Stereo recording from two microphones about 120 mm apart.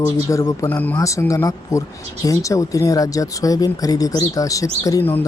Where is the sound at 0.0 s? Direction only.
25° left (ahead or behind).